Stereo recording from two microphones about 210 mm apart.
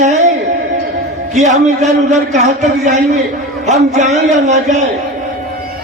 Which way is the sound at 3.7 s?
35° right (ahead or behind).